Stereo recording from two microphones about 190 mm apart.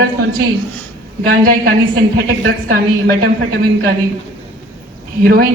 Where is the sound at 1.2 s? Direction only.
55° right (ahead or behind).